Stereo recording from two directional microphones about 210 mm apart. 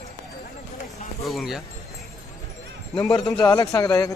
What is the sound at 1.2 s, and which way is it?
Speech, centre (ahead or behind).